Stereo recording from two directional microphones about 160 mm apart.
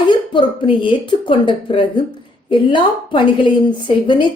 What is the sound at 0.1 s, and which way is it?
A woman's voice, 30° left (ahead or behind).